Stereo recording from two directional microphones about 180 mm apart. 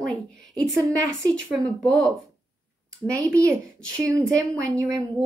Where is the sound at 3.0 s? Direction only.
15° right (ahead or behind).